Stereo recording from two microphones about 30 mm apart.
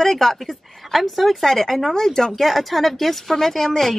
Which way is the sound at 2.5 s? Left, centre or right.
Centre.